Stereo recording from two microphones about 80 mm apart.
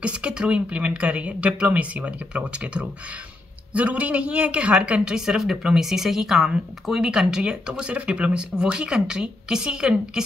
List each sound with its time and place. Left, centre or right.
0.0 s speech: centre